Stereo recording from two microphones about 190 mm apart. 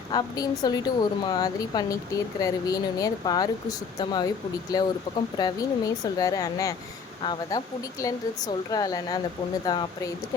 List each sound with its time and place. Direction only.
0.1 s a woman's voice: 20° left (ahead or behind)